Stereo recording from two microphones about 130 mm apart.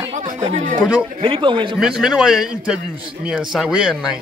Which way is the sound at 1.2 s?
40° right (ahead or behind).